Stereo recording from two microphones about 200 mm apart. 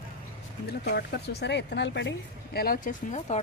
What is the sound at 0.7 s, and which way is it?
Speech, 55° left (ahead or behind).